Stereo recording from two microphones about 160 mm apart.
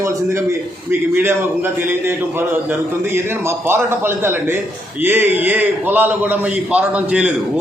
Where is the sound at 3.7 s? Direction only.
15° right (ahead or behind).